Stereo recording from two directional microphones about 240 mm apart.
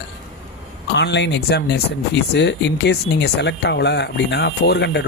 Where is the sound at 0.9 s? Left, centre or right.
Left.